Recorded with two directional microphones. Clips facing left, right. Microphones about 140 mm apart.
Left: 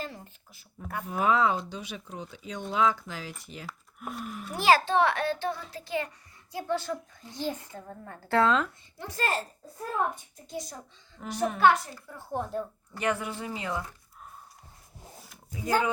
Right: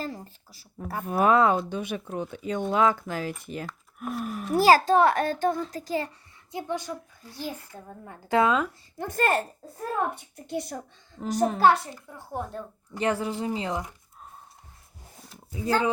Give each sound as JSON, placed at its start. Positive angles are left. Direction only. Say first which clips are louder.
{"t": 0.0, "sound": "speech", "louder": "right 4 dB", "side_deg": -35}
{"t": 1.0, "sound": "speech", "louder": "right 5 dB", "side_deg": -55}
{"t": 3.7, "sound": "speech", "louder": "right 5 dB", "side_deg": 0}
{"t": 4.2, "sound": "speech", "louder": "right 11 dB", "side_deg": -40}
{"t": 6.5, "sound": "speech", "louder": "left 1 dB", "side_deg": -20}
{"t": 9.0, "sound": "speech", "louder": "right 6 dB", "side_deg": -50}
{"t": 11.2, "sound": "speech", "louder": "right 2 dB", "side_deg": -40}
{"t": 11.9, "sound": "speech", "louder": "left 1 dB", "side_deg": -15}
{"t": 12.4, "sound": "speech", "louder": "left 2 dB", "side_deg": 0}
{"t": 13.0, "sound": "speech", "louder": "right 4 dB", "side_deg": -30}